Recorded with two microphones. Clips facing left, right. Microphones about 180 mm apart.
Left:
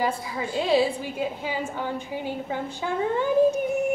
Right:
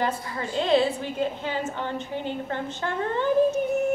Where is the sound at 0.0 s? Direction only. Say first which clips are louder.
Left 1 dB; 5° left (ahead or behind).